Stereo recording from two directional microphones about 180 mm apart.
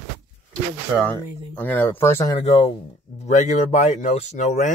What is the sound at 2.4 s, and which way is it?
Speech, 35° left (ahead or behind).